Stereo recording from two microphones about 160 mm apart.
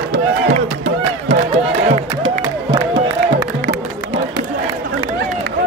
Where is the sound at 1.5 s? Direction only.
40° right (ahead or behind).